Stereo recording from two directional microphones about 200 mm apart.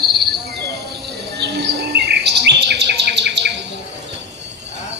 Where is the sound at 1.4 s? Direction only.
55° right (ahead or behind).